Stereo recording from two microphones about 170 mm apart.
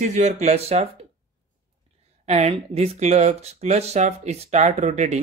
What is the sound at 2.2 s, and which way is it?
Speech, 40° right (ahead or behind).